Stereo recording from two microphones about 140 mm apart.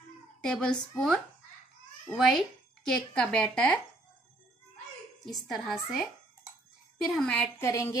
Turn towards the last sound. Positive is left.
turn(degrees=20)  # may be behind; listen again after turning